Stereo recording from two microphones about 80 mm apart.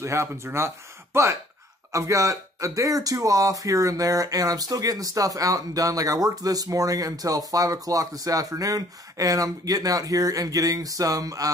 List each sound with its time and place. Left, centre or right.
0.0 s speech: right
1.9 s speech: right